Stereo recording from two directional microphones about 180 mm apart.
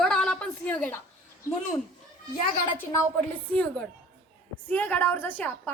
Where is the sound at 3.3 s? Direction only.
10° left (ahead or behind).